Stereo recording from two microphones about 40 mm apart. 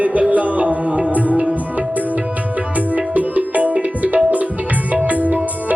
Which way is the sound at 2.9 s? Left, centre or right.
Right.